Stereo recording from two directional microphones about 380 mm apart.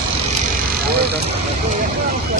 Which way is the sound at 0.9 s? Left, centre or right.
Right.